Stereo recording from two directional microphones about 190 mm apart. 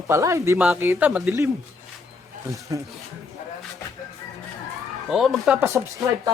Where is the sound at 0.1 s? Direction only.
15° right (ahead or behind).